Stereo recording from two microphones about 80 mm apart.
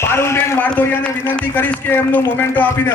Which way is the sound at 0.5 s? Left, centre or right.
Centre.